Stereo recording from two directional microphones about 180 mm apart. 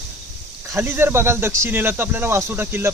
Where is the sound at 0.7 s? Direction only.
15° right (ahead or behind).